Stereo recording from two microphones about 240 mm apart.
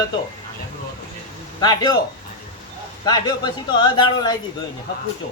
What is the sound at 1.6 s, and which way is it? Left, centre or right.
Speech, centre.